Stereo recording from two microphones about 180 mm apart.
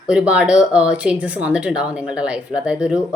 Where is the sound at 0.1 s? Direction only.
5° right (ahead or behind).